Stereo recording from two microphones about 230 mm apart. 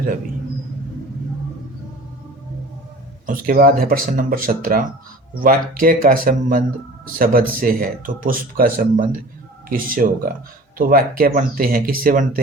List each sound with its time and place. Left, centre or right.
3.2 s speech: right